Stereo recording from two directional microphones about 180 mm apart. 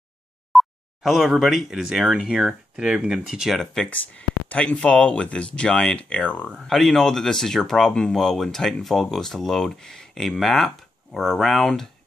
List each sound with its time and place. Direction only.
0.5 s speech: centre (ahead or behind)